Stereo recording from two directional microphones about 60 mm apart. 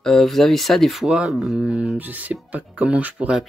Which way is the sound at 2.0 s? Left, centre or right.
Right.